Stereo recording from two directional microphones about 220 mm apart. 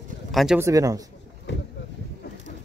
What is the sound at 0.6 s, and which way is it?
Speech, 15° right (ahead or behind).